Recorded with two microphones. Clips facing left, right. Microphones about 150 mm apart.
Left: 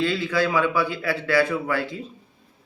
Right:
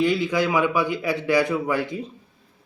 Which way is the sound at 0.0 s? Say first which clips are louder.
Right 2 dB; 15° right (ahead or behind).